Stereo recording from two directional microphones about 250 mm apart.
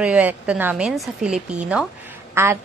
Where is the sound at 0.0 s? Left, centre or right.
Centre.